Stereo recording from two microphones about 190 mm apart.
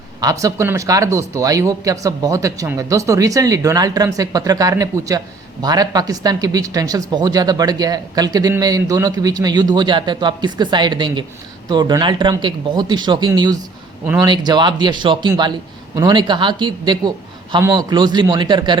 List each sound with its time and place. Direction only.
0.2 s speech: 20° right (ahead or behind)
14.0 s speech: 10° right (ahead or behind)
14.3 s speech: 25° right (ahead or behind)